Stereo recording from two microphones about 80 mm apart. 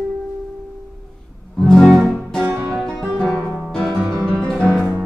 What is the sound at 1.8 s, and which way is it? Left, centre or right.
Music, centre.